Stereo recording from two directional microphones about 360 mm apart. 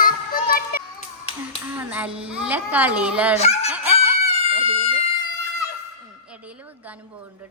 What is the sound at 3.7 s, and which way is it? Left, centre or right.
Chicken, centre.